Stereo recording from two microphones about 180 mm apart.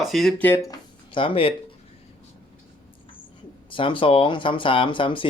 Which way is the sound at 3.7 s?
30° left (ahead or behind).